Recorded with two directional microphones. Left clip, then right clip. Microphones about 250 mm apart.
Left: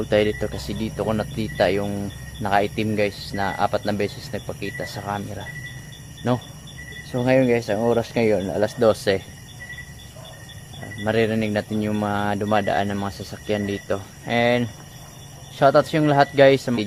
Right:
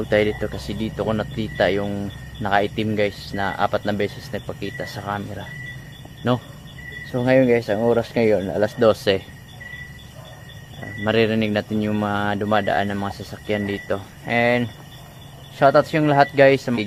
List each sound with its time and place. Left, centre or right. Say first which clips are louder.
0.0 s speech: right 1 dB; centre
7.1 s speech: right 2 dB; centre
11.0 s speech: right 2 dB; centre